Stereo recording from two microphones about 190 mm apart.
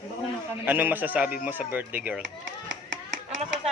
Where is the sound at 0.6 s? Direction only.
10° right (ahead or behind).